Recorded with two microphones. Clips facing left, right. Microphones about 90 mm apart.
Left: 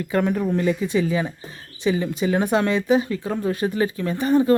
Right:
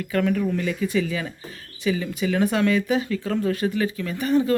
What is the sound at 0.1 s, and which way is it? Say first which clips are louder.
Speech: left 1 dB; 25° left (ahead or behind).